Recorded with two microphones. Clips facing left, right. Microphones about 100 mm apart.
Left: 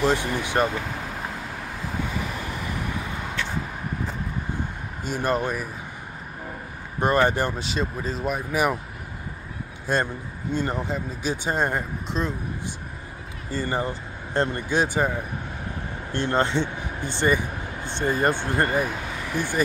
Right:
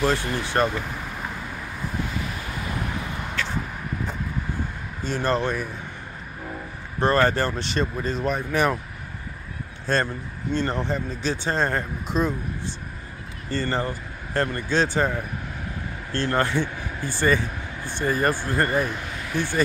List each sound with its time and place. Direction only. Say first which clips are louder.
0.0 s speech: left 1 dB; 15° left (ahead or behind)
5.0 s speech: right 1 dB; 10° left (ahead or behind)
7.0 s speech: right 1 dB; 15° left (ahead or behind)
7.6 s speech: right 2 dB; 5° left (ahead or behind)
9.9 s speech: right 1 dB; 10° left (ahead or behind)
12.1 s speech: right 4 dB; 5° right (ahead or behind)
13.5 s speech: right 1 dB; 10° left (ahead or behind)